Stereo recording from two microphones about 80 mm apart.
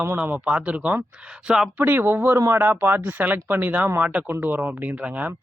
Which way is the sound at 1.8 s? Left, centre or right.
Right.